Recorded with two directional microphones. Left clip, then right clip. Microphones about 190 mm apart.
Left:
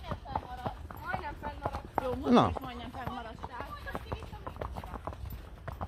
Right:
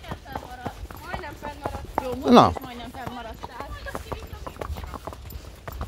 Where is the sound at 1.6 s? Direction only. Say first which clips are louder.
Right 5 dB; 50° right (ahead or behind).